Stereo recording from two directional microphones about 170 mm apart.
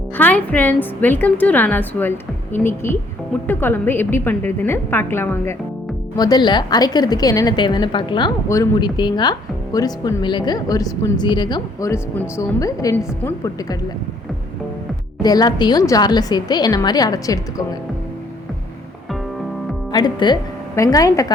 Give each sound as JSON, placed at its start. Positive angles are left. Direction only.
{"t": 0.2, "sound": "a woman's voice", "side_deg": 10}
{"t": 15.2, "sound": "speech", "side_deg": 25}
{"t": 19.9, "sound": "a woman's voice", "side_deg": 25}